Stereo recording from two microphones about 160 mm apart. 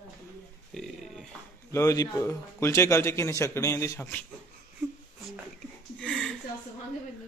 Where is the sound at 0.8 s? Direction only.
Centre (ahead or behind).